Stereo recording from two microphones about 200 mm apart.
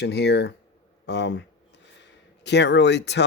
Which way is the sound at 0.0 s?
55° left (ahead or behind).